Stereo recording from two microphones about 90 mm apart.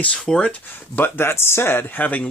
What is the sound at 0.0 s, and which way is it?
Speech, 10° left (ahead or behind).